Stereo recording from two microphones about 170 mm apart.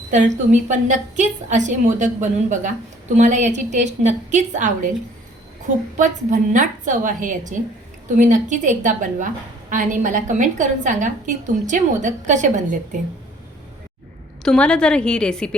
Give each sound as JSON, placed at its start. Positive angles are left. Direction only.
{"t": 0.1, "sound": "a woman's voice", "side_deg": -45}
{"t": 6.0, "sound": "a woman's voice", "side_deg": -50}
{"t": 14.4, "sound": "a woman's voice", "side_deg": 5}